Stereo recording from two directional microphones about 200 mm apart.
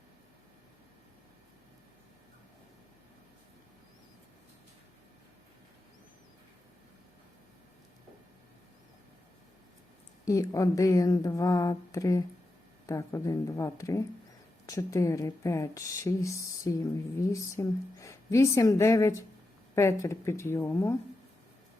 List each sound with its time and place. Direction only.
10.2 s speech: 15° left (ahead or behind)